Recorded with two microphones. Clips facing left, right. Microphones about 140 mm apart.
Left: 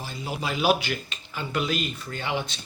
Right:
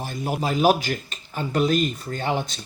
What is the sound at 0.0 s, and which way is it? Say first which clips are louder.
A man's voice: right 5 dB; 50° right (ahead or behind).